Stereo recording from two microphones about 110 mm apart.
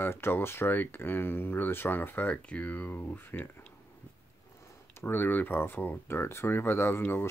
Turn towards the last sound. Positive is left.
turn(degrees=20)  # may be behind; listen again after turning